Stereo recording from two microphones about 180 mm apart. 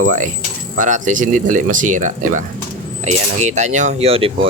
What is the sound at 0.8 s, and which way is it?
Speech, 45° right (ahead or behind).